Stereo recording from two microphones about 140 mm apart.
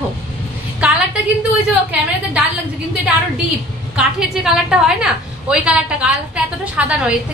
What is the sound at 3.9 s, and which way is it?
A woman's voice, 5° right (ahead or behind).